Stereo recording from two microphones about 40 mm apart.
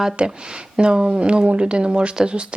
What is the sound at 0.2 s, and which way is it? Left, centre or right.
Speech, right.